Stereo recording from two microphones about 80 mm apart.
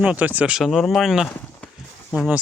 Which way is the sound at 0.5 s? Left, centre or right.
Centre.